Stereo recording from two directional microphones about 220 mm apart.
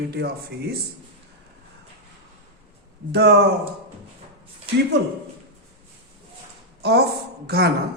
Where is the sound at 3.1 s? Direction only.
50° right (ahead or behind).